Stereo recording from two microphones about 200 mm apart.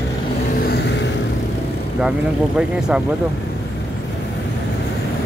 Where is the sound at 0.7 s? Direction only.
55° left (ahead or behind).